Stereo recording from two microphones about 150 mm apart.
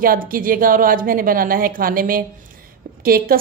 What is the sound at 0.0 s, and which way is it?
A woman's voice, 70° right (ahead or behind).